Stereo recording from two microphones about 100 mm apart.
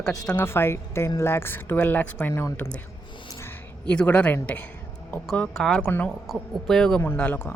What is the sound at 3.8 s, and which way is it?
Speech, 15° left (ahead or behind).